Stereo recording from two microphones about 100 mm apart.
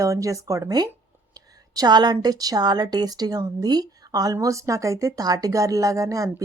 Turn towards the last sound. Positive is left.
turn(degrees=-35)  # may be behind; listen again after turning